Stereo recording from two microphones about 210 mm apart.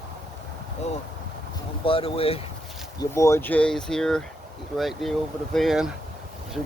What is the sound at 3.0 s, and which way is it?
Speech, 15° left (ahead or behind).